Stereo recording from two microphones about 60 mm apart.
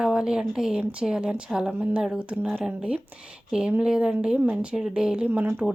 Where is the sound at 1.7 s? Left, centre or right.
Right.